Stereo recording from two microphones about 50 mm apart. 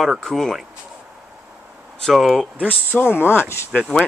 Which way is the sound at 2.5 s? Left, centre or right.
Left.